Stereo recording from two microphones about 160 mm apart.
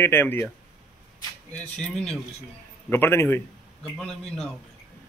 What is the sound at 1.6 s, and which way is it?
A man's voice, 5° left (ahead or behind).